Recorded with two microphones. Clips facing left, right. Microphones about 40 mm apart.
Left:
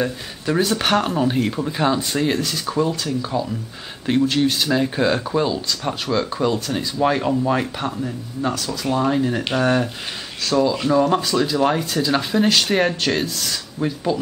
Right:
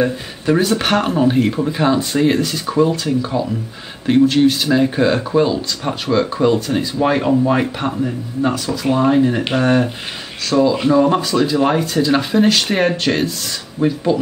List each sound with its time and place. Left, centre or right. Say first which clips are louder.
0.0 s speech: right 5 dB; centre